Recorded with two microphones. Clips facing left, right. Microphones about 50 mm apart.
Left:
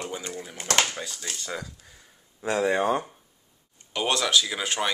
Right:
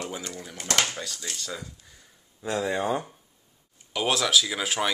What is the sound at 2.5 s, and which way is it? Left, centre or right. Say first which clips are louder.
Speech: left 3 dB; left.